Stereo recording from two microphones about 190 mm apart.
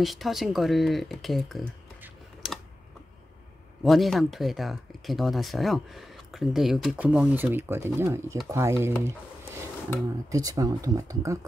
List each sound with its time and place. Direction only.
0.0 s speech: centre (ahead or behind)
2.4 s typing: 5° right (ahead or behind)
3.8 s speech: centre (ahead or behind); by 11.3 s 15° right (ahead or behind)